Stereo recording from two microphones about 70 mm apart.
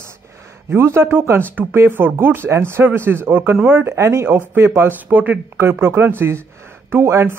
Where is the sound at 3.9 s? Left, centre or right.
Right.